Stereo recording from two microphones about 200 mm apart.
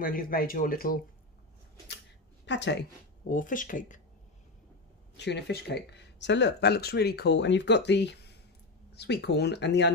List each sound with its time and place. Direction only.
0.0 s speech: 45° left (ahead or behind)
2.4 s a woman's voice: 65° left (ahead or behind)
3.3 s speech: 40° left (ahead or behind)
5.1 s speech: 60° left (ahead or behind)